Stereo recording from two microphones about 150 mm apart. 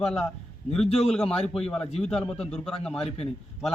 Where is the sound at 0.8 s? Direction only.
40° left (ahead or behind).